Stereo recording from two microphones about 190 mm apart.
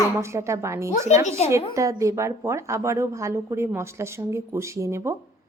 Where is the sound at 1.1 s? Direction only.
35° left (ahead or behind).